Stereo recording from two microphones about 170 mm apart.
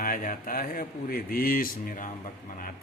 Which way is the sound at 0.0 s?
55° left (ahead or behind).